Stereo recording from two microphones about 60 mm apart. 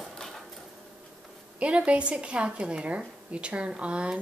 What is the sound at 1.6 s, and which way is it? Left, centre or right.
A woman's voice, centre.